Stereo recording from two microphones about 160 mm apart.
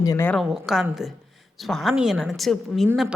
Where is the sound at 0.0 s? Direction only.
20° left (ahead or behind).